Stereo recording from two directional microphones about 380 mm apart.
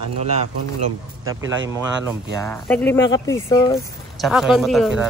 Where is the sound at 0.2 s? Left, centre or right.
Centre.